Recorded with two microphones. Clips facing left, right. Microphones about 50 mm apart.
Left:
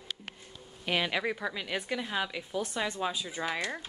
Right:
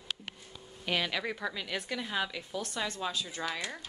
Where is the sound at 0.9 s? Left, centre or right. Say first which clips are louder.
Left 2 dB; centre.